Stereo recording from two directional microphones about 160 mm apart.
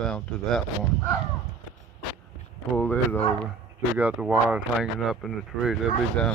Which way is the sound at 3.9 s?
10° right (ahead or behind).